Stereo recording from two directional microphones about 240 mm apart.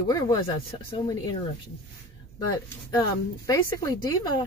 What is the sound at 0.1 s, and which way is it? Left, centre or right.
A woman's voice, centre.